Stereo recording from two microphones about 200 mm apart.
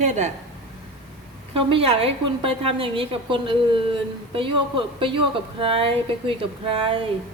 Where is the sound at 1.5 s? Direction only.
30° right (ahead or behind).